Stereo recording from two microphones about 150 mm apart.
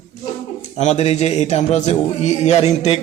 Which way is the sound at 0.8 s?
50° left (ahead or behind).